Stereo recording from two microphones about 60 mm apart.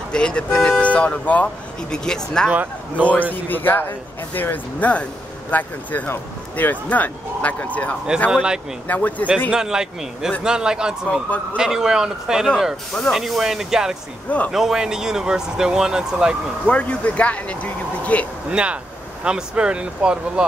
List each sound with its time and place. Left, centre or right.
0.1 s speech: centre
1.9 s speech: centre
2.5 s a man's voice: right
3.4 s speech: left
8.3 s speech: centre
8.8 s speech: left
9.5 s speech: centre
11.1 s speech: left
11.5 s speech: centre
16.6 s speech: left
18.5 s speech: centre